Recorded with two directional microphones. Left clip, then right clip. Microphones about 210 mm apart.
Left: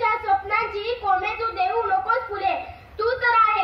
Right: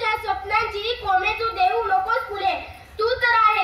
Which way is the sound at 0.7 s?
40° left (ahead or behind).